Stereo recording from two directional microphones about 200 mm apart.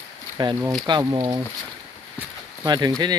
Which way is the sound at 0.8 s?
20° right (ahead or behind).